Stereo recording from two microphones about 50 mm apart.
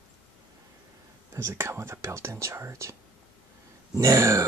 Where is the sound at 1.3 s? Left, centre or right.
Right.